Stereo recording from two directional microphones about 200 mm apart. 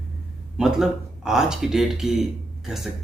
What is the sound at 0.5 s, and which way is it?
Speech, 5° right (ahead or behind).